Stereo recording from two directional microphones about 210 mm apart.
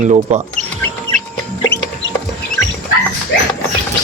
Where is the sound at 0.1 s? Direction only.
25° right (ahead or behind).